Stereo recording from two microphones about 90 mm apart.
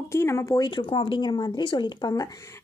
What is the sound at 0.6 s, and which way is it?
Speech, 75° left (ahead or behind).